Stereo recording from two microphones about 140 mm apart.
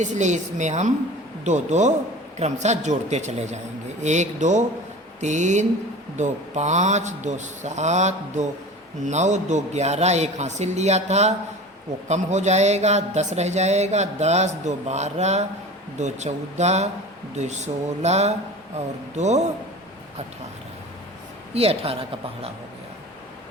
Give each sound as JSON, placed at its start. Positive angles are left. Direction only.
{"t": 0.0, "sound": "speech", "side_deg": -60}
{"t": 21.5, "sound": "speech", "side_deg": -45}